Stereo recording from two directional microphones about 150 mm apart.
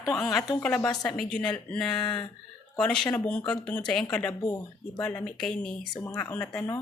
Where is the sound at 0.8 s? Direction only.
25° left (ahead or behind).